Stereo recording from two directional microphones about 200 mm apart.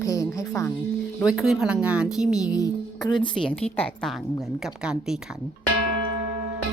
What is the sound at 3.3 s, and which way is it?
Speech, 5° left (ahead or behind).